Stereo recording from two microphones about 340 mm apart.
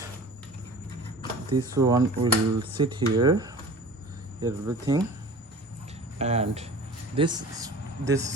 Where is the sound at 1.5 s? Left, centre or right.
Centre.